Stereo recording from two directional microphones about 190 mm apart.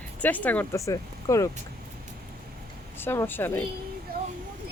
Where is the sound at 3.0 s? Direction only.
10° left (ahead or behind).